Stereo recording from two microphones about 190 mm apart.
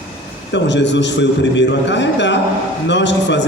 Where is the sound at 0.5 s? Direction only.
70° left (ahead or behind).